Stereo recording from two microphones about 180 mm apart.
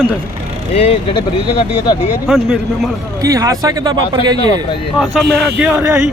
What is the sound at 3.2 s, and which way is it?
Speech, 20° right (ahead or behind).